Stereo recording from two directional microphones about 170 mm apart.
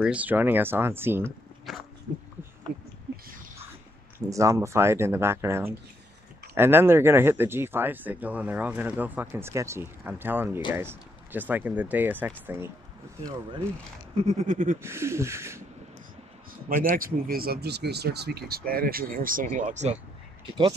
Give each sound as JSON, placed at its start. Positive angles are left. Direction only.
{"t": 0.0, "sound": "speech", "side_deg": -10}
{"t": 1.7, "sound": "dog", "side_deg": 0}
{"t": 4.3, "sound": "speech", "side_deg": -20}
{"t": 14.1, "sound": "a sound", "side_deg": -40}
{"t": 14.8, "sound": "speech", "side_deg": -15}
{"t": 16.6, "sound": "speech", "side_deg": -55}